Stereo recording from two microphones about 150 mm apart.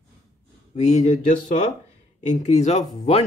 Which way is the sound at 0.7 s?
50° left (ahead or behind).